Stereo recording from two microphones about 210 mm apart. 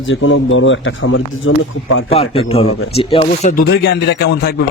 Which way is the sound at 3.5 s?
50° left (ahead or behind).